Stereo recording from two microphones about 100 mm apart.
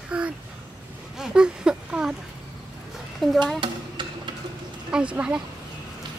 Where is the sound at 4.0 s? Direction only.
50° right (ahead or behind).